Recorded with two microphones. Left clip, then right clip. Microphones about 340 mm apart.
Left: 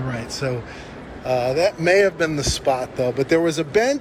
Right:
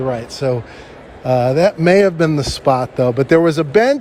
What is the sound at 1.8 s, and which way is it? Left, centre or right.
Speech, right.